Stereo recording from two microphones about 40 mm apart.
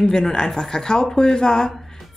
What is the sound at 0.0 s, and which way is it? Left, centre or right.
A woman's voice, centre.